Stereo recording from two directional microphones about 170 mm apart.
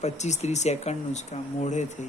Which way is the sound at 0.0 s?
40° left (ahead or behind).